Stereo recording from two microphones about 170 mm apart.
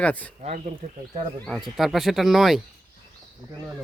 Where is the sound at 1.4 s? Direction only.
Centre (ahead or behind).